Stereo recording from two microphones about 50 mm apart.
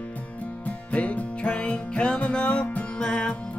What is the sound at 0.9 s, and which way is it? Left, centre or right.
Music, left.